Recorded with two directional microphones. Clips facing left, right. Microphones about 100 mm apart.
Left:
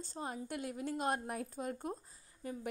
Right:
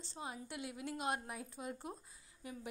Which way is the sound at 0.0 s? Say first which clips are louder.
Left 4 dB; 45° left (ahead or behind).